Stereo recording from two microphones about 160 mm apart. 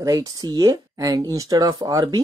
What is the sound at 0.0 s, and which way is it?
Speech, 20° right (ahead or behind).